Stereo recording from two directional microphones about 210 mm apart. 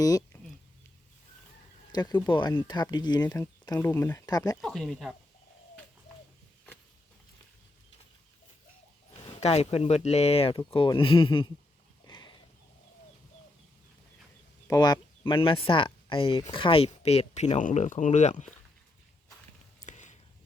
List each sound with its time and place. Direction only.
0.3 s a sound: 15° left (ahead or behind)
1.9 s speech: 20° left (ahead or behind)
4.6 s speech: centre (ahead or behind)
9.4 s speech: 30° left (ahead or behind)
12.0 s horse: 20° left (ahead or behind)
14.7 s speech: 20° left (ahead or behind); by 18.5 s 35° left (ahead or behind)
19.8 s a sound: 35° left (ahead or behind)